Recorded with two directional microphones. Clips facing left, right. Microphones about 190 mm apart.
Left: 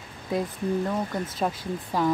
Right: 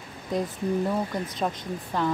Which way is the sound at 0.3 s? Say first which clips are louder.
Even; 5° left (ahead or behind).